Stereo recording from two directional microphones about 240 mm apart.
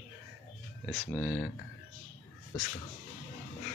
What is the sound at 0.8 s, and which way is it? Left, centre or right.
Speech, centre.